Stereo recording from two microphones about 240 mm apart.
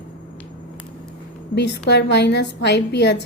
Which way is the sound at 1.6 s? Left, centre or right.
Left.